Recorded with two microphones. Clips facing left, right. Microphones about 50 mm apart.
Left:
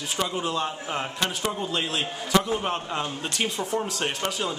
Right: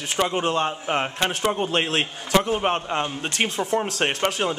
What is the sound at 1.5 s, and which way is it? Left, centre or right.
Speech, right.